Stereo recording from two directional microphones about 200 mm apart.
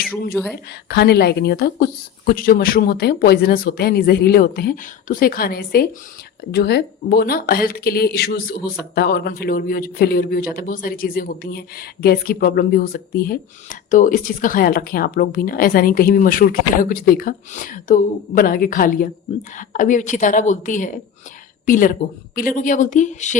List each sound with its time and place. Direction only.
0.4 s a woman's voice: 5° right (ahead or behind)
0.7 s a woman's voice: 55° left (ahead or behind); by 23.4 s 35° left (ahead or behind)